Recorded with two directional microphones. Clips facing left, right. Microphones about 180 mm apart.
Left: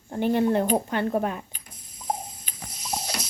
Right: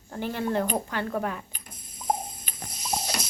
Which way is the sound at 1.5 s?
50° right (ahead or behind).